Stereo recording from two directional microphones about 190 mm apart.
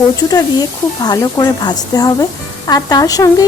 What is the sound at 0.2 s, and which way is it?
Speech, 20° left (ahead or behind).